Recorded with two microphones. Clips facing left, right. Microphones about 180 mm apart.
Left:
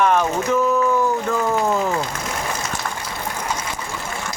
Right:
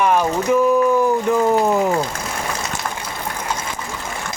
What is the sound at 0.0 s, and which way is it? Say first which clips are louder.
Speech: right 1 dB; 10° right (ahead or behind).